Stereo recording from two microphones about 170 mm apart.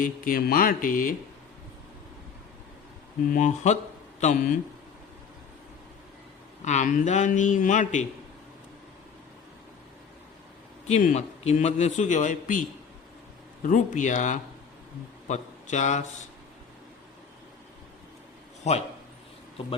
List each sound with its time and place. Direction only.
0.0 s speech: 55° left (ahead or behind)
3.3 s a man's voice: 45° left (ahead or behind)
6.7 s a man's voice: 45° left (ahead or behind)
10.8 s a man's voice: 40° left (ahead or behind)
13.7 s a man's voice: 45° left (ahead or behind)